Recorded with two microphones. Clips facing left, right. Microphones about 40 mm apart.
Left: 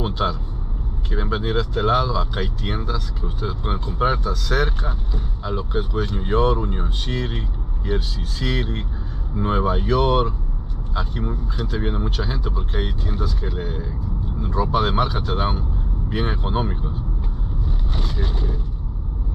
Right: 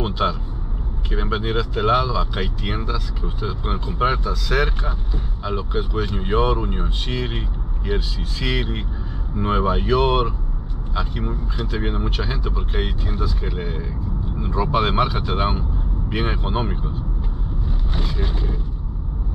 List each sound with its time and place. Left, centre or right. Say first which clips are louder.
0.0 s vehicle: right 1 dB; right
1.1 s speech: even; right
12.0 s speech: even; right
18.0 s speech: even; centre